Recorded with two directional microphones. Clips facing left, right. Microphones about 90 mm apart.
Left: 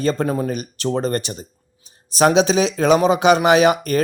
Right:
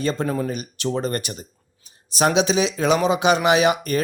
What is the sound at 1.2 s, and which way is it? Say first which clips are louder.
Speech: left 2 dB; 25° left (ahead or behind).